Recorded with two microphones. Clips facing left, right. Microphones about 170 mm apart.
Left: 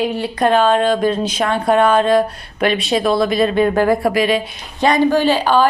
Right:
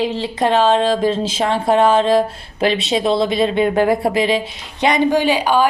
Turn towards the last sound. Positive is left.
turn(degrees=-15)  # may be behind; listen again after turning